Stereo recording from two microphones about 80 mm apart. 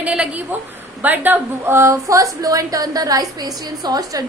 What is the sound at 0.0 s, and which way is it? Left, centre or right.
A woman's voice, centre.